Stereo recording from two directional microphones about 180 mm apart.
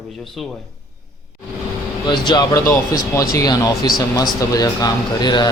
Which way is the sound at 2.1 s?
25° left (ahead or behind).